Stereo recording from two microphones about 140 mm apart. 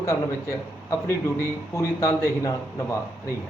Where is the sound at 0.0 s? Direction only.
20° left (ahead or behind).